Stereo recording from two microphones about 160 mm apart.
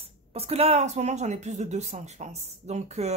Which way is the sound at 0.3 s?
40° right (ahead or behind).